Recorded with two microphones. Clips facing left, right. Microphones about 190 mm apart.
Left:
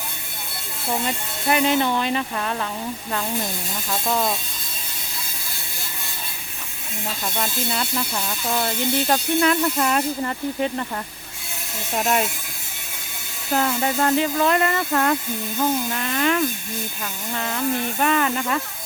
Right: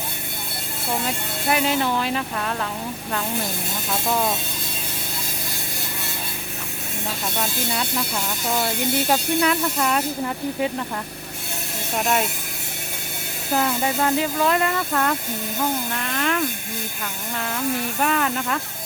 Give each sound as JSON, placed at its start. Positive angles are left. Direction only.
{"t": 1.0, "sound": "speech", "side_deg": 0}
{"t": 4.1, "sound": "speech", "side_deg": 0}
{"t": 7.3, "sound": "speech", "side_deg": -5}
{"t": 11.9, "sound": "speech", "side_deg": 0}
{"t": 13.5, "sound": "speech", "side_deg": 0}